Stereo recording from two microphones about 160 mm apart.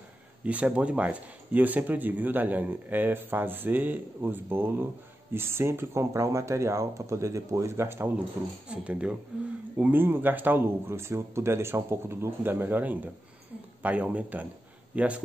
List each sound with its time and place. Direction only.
0.5 s speech: 10° right (ahead or behind)